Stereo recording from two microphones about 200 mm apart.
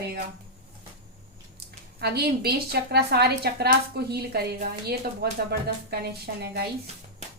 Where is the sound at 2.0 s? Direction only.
55° right (ahead or behind).